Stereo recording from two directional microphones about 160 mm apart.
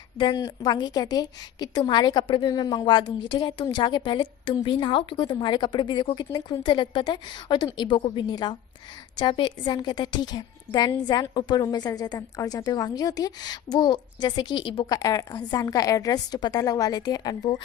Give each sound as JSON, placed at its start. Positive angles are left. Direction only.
{"t": 0.2, "sound": "a woman's voice", "side_deg": 25}